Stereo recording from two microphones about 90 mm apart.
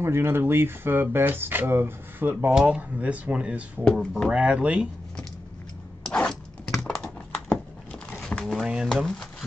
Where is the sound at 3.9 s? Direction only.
Centre (ahead or behind).